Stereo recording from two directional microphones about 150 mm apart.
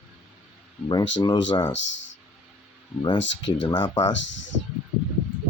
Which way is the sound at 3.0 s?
30° left (ahead or behind).